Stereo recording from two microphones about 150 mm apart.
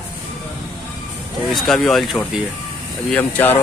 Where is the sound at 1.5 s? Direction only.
Centre (ahead or behind).